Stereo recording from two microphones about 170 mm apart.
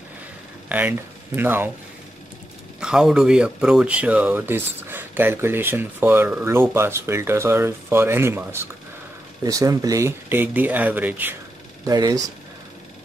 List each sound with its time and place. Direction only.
0.7 s speech: 10° right (ahead or behind)
2.8 s speech: 5° right (ahead or behind)
11.8 s speech: 20° right (ahead or behind)